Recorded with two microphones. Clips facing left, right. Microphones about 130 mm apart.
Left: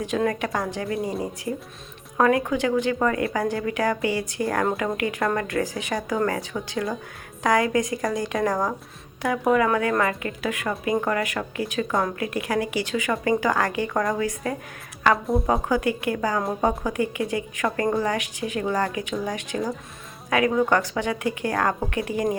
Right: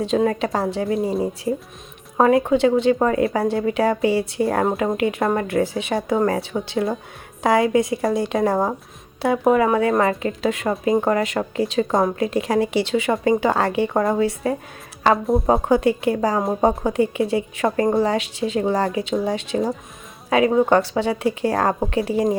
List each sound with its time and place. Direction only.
0.1 s a woman's voice: 25° right (ahead or behind)